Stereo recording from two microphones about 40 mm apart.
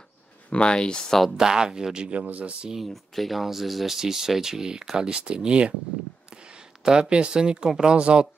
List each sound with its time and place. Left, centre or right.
0.5 s speech: left
1.3 s speech: centre
2.2 s speech: right
2.9 s speech: centre; by 5.7 s right
6.3 s a sound: right
6.8 s speech: right